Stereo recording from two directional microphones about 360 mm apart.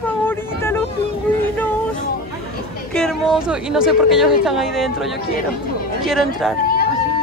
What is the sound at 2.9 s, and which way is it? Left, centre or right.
Speech, centre.